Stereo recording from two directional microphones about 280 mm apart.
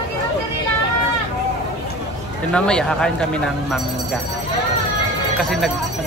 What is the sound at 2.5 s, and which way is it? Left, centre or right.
Speech, centre.